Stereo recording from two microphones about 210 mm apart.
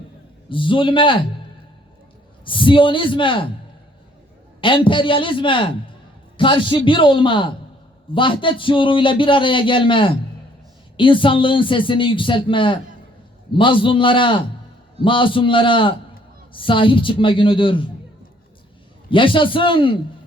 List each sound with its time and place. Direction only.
0.5 s a man's voice: 25° left (ahead or behind)
2.4 s a man's voice: 25° left (ahead or behind)
4.6 s a man's voice: 25° left (ahead or behind)
19.1 s a man's voice: 25° left (ahead or behind)